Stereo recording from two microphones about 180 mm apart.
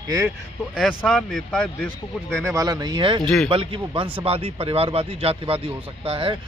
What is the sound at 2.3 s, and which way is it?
A man's voice, 15° right (ahead or behind).